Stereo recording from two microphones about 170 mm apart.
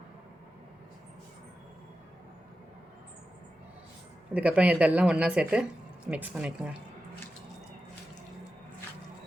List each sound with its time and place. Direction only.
4.4 s speech: 5° right (ahead or behind)